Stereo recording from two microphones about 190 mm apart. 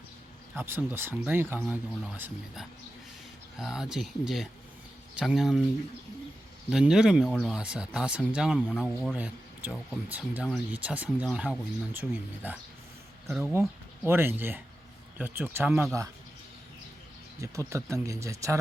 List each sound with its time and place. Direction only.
0.5 s speech: 10° right (ahead or behind)
6.7 s speech: 5° right (ahead or behind)
17.4 s speech: 15° right (ahead or behind)